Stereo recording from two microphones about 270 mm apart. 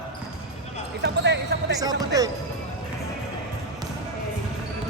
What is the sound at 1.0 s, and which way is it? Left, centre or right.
Speech, right.